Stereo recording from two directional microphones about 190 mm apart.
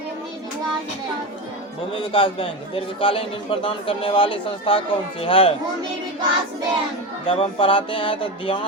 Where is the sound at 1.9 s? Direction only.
30° left (ahead or behind).